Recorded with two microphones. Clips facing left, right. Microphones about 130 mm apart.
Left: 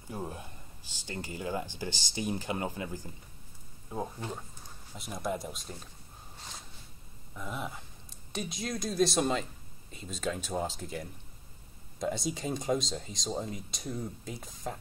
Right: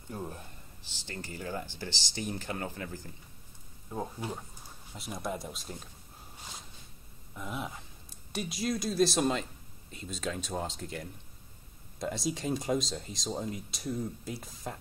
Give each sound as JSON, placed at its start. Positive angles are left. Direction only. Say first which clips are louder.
{"t": 0.1, "sound": "a man's voice", "louder": "left 1 dB", "side_deg": 15}
{"t": 1.9, "sound": "speech", "louder": "left 2 dB", "side_deg": 50}
{"t": 2.1, "sound": "speech", "louder": "left 3 dB", "side_deg": 15}
{"t": 4.2, "sound": "speech", "louder": "right 1 dB", "side_deg": -10}
{"t": 7.3, "sound": "speech", "louder": "even", "side_deg": 0}